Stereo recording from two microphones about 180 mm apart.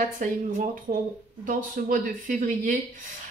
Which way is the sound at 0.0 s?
45° right (ahead or behind).